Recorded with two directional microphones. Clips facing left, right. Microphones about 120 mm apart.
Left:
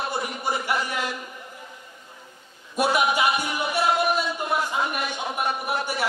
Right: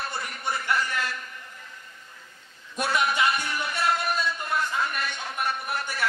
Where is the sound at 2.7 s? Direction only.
15° left (ahead or behind).